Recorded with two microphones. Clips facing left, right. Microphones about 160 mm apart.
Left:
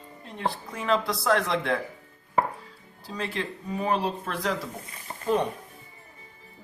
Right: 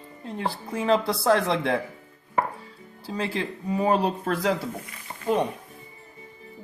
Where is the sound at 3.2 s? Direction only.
30° right (ahead or behind).